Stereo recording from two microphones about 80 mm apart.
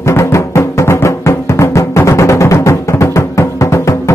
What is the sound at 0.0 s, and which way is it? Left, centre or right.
Music, left.